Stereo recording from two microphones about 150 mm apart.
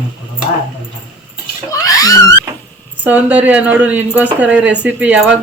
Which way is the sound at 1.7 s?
25° left (ahead or behind).